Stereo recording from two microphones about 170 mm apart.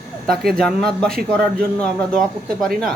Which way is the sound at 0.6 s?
5° left (ahead or behind).